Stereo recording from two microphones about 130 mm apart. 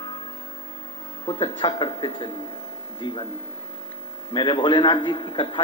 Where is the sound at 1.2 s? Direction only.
40° left (ahead or behind).